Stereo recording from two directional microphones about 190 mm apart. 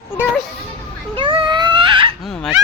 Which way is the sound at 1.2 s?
25° right (ahead or behind).